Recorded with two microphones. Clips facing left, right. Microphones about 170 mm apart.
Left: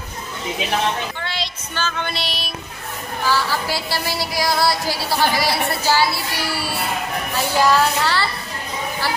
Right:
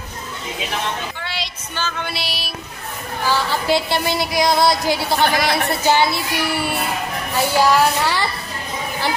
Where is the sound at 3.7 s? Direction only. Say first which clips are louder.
Right 6 dB; 20° right (ahead or behind).